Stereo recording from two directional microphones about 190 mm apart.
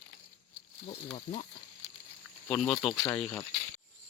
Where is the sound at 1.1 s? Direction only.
35° left (ahead or behind).